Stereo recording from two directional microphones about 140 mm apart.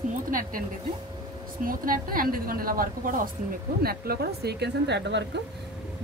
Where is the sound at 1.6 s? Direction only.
80° right.